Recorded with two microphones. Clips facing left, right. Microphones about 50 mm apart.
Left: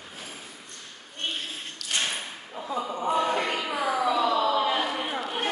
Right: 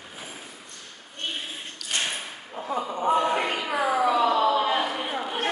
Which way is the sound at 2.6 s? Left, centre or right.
Right.